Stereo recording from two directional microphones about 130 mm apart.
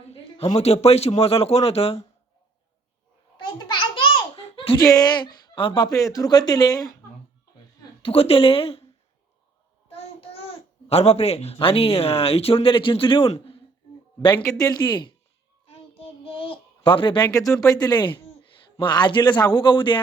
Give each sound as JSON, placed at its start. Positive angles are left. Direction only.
{"t": 0.5, "sound": "speech", "side_deg": 55}
{"t": 3.6, "sound": "babbling", "side_deg": 40}
{"t": 4.8, "sound": "speech", "side_deg": 25}
{"t": 8.0, "sound": "speech", "side_deg": 45}
{"t": 9.9, "sound": "a child's voice", "side_deg": 50}
{"t": 14.6, "sound": "speech", "side_deg": 30}
{"t": 15.6, "sound": "child singing", "side_deg": 50}
{"t": 18.8, "sound": "speech", "side_deg": 35}